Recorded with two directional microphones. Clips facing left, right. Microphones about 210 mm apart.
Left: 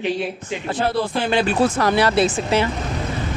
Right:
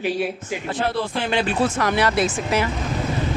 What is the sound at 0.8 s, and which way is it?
Speech, 35° left (ahead or behind).